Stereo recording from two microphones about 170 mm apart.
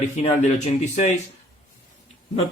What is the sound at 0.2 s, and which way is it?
Speech, 40° left (ahead or behind).